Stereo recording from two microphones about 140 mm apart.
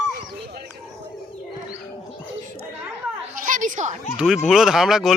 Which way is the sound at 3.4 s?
70° right (ahead or behind).